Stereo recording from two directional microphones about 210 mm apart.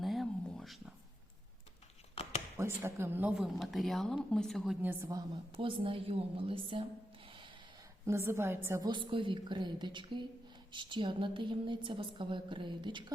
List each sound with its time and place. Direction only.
0.0 s a sound: centre (ahead or behind)
2.6 s speech: 10° right (ahead or behind)
5.5 s a woman's voice: 25° right (ahead or behind)
8.0 s a woman's voice: 15° right (ahead or behind)